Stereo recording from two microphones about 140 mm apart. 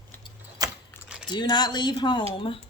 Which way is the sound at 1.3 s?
30° left (ahead or behind).